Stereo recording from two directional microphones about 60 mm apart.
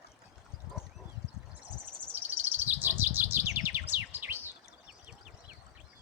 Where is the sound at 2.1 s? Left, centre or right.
Right.